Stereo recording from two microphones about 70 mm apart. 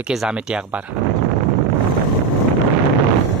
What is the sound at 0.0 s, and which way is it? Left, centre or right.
Speech, centre.